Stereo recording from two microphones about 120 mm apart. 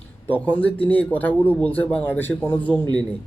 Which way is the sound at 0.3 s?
15° left (ahead or behind).